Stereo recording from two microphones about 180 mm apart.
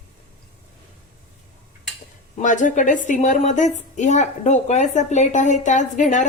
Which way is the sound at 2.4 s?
45° left (ahead or behind).